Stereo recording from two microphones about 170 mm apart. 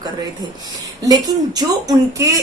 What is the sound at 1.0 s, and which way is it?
A woman's voice, 20° right (ahead or behind).